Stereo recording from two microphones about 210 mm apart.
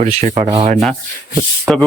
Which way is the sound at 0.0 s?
35° right (ahead or behind).